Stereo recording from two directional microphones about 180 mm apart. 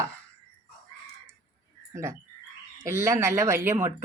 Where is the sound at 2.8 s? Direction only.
15° right (ahead or behind).